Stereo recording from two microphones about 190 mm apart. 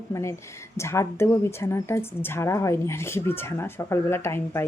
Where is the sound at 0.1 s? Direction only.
15° left (ahead or behind).